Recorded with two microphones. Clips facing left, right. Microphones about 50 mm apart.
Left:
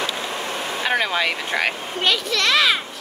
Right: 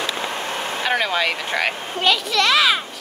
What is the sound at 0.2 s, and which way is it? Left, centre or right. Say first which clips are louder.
Vehicle: right 1 dB; right.